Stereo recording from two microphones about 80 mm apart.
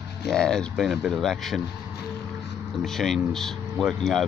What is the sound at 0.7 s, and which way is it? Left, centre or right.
Speech, centre.